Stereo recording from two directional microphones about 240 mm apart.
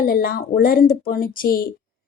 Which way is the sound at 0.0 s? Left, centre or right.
Left.